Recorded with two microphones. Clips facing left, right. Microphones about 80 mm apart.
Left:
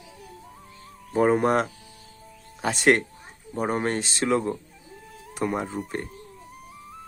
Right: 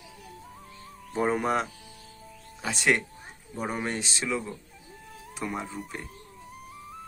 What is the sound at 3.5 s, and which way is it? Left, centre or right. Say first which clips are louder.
Speech: left 6 dB; left.